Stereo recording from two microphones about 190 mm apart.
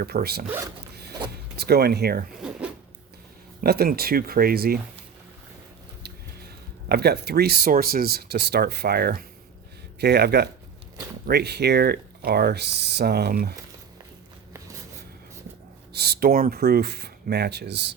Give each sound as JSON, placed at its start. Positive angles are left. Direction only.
{"t": 0.0, "sound": "speech", "side_deg": -55}
{"t": 0.4, "sound": "speech", "side_deg": -10}
{"t": 1.5, "sound": "speech", "side_deg": -55}
{"t": 2.4, "sound": "zipper", "side_deg": -5}
{"t": 3.6, "sound": "speech", "side_deg": -55}
{"t": 6.0, "sound": "speech", "side_deg": -55}
{"t": 15.9, "sound": "speech", "side_deg": -55}